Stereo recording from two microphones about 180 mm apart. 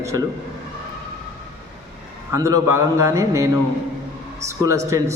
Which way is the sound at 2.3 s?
15° right (ahead or behind).